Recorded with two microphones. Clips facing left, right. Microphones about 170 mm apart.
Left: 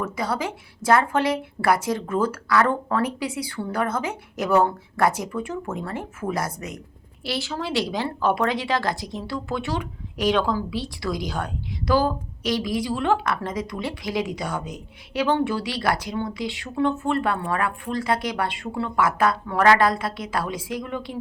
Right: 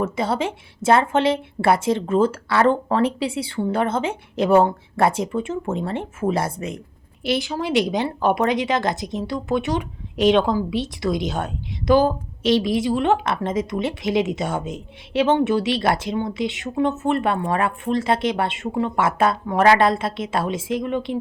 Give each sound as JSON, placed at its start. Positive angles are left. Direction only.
{"t": 0.0, "sound": "a woman's voice", "side_deg": -25}
{"t": 7.3, "sound": "a woman's voice", "side_deg": -15}